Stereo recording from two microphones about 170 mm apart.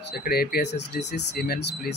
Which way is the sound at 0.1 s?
65° left (ahead or behind).